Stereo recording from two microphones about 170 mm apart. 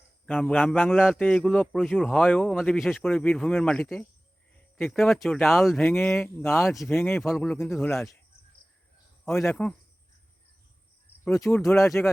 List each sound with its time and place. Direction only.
0.3 s speech: 10° left (ahead or behind)
0.9 s speech: 5° right (ahead or behind); by 6.7 s 15° left (ahead or behind)
6.7 s speech: centre (ahead or behind)
6.9 s speech: 10° left (ahead or behind)
9.4 s speech: 5° left (ahead or behind)
11.3 s speech: 15° left (ahead or behind)